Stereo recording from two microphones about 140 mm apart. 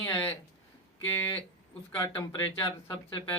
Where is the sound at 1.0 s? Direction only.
15° left (ahead or behind).